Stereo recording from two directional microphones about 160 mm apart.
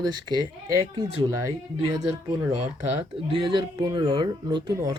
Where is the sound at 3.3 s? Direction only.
30° right (ahead or behind).